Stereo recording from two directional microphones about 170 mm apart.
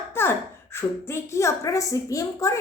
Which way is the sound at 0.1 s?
15° left (ahead or behind).